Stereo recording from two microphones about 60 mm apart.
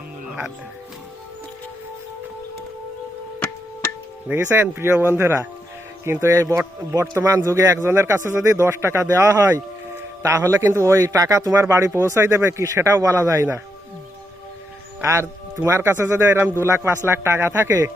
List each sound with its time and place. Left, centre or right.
4.3 s speech: right
4.7 s speech: right
7.0 s speech: right
7.3 s speech: right
11.7 s speech: right
15.0 s speech: right